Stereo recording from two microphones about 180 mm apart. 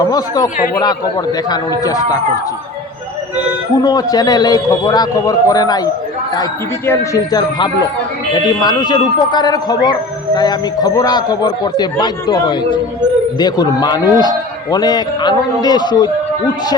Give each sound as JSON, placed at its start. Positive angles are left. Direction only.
{"t": 0.0, "sound": "speech", "side_deg": 20}
{"t": 3.8, "sound": "speech", "side_deg": 20}